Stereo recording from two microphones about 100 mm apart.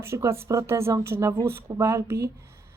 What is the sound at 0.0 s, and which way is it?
A woman's voice, 25° right (ahead or behind).